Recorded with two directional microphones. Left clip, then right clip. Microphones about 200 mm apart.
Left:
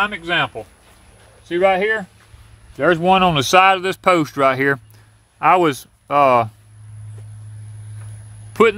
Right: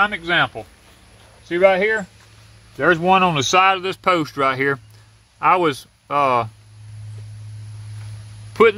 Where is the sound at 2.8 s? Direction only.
35° left (ahead or behind).